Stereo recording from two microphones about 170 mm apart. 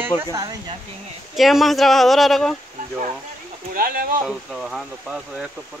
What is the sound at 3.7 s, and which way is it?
Speech, 60° right (ahead or behind).